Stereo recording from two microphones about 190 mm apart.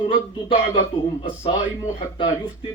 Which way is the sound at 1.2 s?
25° left (ahead or behind).